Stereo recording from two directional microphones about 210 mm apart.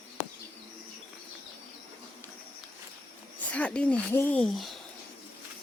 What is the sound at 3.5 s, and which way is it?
Speech, 5° left (ahead or behind).